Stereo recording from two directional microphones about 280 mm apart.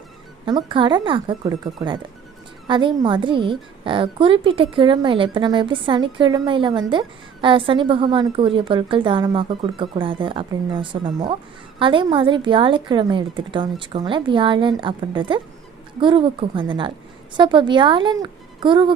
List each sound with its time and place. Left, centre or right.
0.4 s a woman's voice: centre